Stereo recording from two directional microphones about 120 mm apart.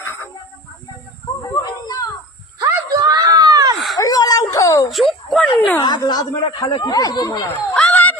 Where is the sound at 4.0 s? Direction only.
30° left (ahead or behind).